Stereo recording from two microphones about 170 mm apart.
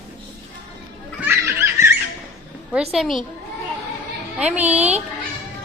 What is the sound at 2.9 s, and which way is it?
Speech, centre (ahead or behind).